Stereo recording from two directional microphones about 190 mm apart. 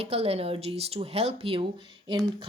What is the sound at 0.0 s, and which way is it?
Speech, 30° right (ahead or behind).